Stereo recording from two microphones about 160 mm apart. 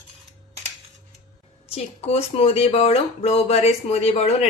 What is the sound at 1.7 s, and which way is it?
Speech, 40° left (ahead or behind).